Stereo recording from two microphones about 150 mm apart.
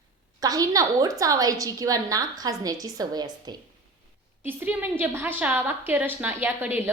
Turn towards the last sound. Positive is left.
turn(degrees=-10)  # may be behind; listen again after turning